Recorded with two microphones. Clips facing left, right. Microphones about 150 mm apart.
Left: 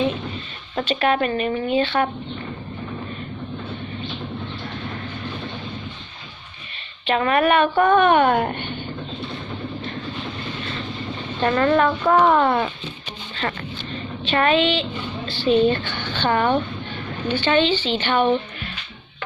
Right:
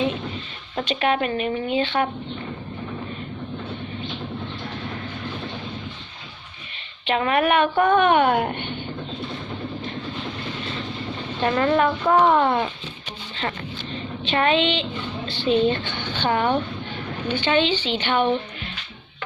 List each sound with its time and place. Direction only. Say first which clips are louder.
0.8 s a woman's voice: left 2 dB; 15° right (ahead or behind)
7.0 s a woman's voice: left 2 dB; 15° right (ahead or behind)
11.3 s a woman's voice: left 2 dB; 10° right (ahead or behind)
14.3 s a woman's voice: left 2 dB; 20° right (ahead or behind)